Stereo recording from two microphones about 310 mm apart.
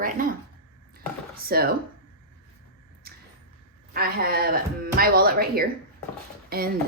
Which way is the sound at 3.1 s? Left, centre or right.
Right.